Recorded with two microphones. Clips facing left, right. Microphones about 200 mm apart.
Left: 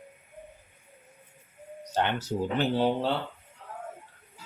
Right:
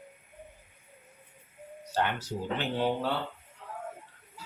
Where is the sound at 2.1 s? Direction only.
35° left (ahead or behind).